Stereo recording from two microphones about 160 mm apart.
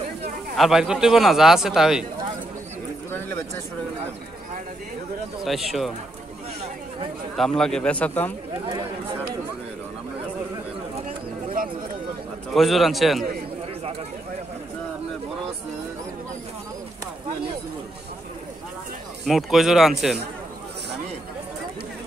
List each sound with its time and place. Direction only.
0.6 s a man's voice: 5° right (ahead or behind)
3.1 s a sound: 15° left (ahead or behind)
5.4 s a man's voice: centre (ahead or behind)
7.3 s a man's voice: 5° left (ahead or behind)
11.5 s a sound: 60° right (ahead or behind)
12.5 s a man's voice: centre (ahead or behind)
19.2 s a man's voice: centre (ahead or behind)